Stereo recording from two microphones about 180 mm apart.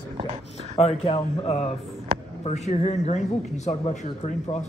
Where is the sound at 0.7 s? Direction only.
35° left (ahead or behind).